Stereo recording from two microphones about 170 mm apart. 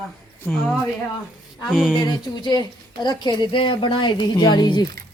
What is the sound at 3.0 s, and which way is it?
A woman's voice, 25° left (ahead or behind).